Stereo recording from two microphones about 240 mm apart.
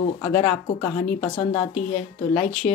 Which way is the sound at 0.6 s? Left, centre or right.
Left.